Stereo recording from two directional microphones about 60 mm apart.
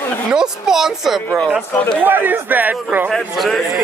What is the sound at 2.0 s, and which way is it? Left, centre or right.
A man's voice, right.